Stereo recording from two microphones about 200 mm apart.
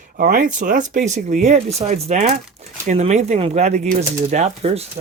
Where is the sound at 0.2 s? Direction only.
45° right (ahead or behind).